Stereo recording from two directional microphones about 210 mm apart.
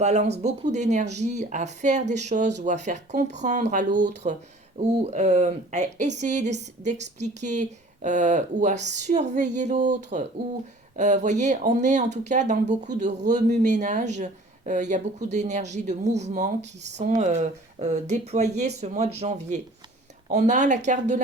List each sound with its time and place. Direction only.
0.0 s speech: 35° right (ahead or behind)